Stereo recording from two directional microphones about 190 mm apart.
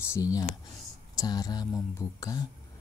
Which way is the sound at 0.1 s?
20° left (ahead or behind).